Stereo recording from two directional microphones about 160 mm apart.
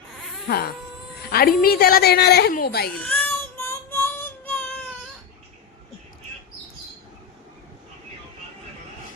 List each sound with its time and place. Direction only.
0.4 s cat: 80° left
1.3 s a woman's voice: 70° left (ahead or behind)
3.0 s child singing: 10° left (ahead or behind)